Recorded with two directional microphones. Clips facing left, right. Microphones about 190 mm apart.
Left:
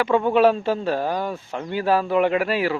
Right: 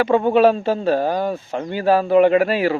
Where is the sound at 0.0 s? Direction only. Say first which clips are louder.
Right 3 dB; 40° right (ahead or behind).